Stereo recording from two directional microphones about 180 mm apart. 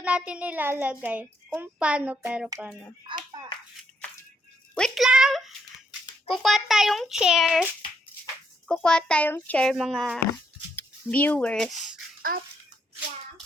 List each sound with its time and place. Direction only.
0.0 s a child's voice: 5° right (ahead or behind)
4.7 s a sound: centre (ahead or behind)
6.2 s a child's voice: centre (ahead or behind)
12.3 s a child's voice: 55° right (ahead or behind)